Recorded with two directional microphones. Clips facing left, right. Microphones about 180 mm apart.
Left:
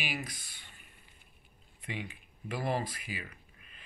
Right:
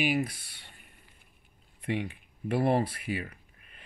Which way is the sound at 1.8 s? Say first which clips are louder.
Right 9 dB; 65° right (ahead or behind).